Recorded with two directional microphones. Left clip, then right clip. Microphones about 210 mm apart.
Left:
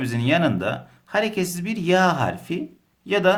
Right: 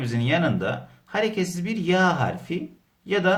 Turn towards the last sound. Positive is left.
turn(degrees=35)  # may be behind; listen again after turning